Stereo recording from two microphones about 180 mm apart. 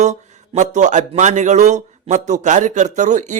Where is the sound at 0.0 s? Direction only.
40° right (ahead or behind).